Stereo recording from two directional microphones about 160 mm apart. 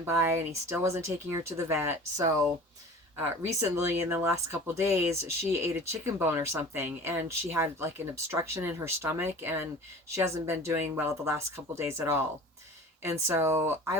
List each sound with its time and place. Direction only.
0.0 s speech: 15° right (ahead or behind)